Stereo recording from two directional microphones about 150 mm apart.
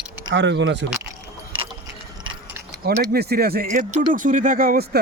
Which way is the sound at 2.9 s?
90° right.